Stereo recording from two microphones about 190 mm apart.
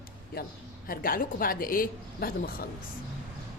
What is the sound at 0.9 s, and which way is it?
A woman's voice, 50° left (ahead or behind).